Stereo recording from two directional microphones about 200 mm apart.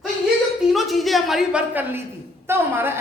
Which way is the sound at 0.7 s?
Centre (ahead or behind).